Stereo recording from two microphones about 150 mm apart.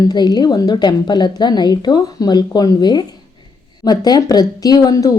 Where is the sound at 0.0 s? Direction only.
30° left (ahead or behind).